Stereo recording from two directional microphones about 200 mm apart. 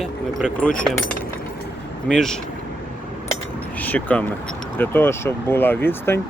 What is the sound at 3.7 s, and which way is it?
Speech, 10° left (ahead or behind).